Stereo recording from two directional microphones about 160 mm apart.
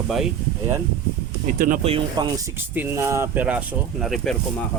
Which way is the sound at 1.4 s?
55° right (ahead or behind).